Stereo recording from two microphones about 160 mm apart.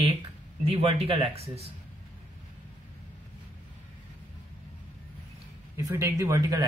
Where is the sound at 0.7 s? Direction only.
40° right (ahead or behind).